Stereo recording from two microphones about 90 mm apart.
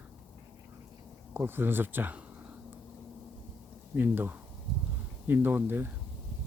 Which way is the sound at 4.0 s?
20° right (ahead or behind).